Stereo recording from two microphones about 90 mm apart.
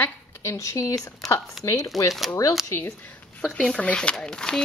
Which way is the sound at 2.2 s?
Centre (ahead or behind).